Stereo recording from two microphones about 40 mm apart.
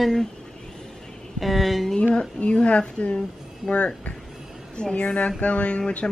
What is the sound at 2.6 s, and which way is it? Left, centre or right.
A woman's voice, left.